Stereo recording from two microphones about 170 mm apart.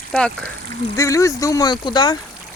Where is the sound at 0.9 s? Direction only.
20° left (ahead or behind).